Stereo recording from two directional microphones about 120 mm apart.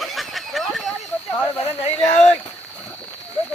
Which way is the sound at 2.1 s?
65° left (ahead or behind).